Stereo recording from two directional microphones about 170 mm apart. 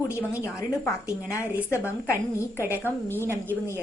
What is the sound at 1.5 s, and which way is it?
Speech, 10° right (ahead or behind).